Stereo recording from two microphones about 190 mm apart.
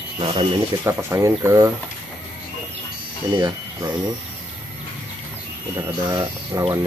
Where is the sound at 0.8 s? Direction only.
15° right (ahead or behind).